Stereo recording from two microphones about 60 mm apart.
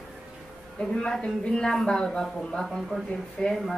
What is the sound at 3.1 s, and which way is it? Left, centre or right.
Speech, centre.